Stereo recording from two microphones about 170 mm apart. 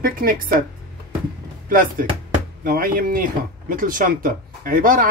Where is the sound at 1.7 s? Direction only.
55° right (ahead or behind).